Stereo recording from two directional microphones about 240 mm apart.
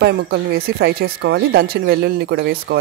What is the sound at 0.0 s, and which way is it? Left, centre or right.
Speech, right.